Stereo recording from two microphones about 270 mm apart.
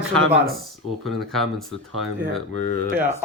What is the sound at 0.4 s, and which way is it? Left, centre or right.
Speech, centre.